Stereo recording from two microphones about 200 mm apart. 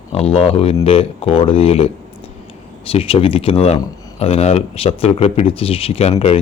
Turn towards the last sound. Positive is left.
turn(degrees=30)  # may be behind; listen again after turning